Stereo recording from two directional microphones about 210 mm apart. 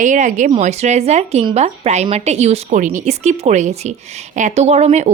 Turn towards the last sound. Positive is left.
turn(degrees=-30)  # may be behind; listen again after turning